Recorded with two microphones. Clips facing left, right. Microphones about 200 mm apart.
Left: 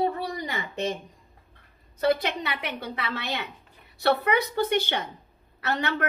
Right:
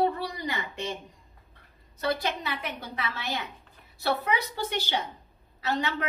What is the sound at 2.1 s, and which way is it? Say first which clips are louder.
A woman's voice: left 1 dB; 65° left (ahead or behind).